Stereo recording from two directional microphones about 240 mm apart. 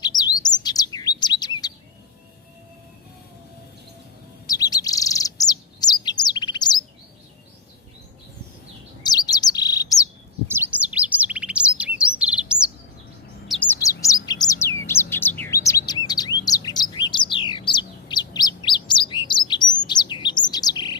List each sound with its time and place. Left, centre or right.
0.0 s chirp: centre
4.4 s chirp: centre
9.0 s chirp: centre
10.5 s chirp: centre
13.5 s bird: centre
15.4 s chirp: centre
16.0 s bird: centre